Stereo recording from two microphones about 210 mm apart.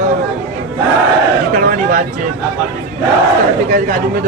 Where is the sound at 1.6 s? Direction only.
40° right (ahead or behind).